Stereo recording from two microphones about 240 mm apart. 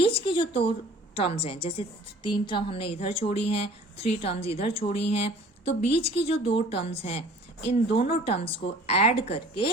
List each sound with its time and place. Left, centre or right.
0.0 s a woman's voice: left